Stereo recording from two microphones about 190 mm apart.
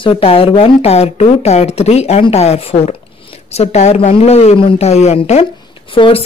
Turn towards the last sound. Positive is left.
turn(degrees=25)  # may be behind; listen again after turning